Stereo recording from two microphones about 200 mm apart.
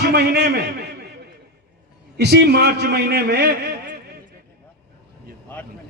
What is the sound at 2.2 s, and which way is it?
A man's voice, 55° right (ahead or behind).